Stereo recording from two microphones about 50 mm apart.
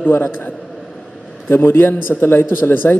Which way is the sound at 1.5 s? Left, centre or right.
Left.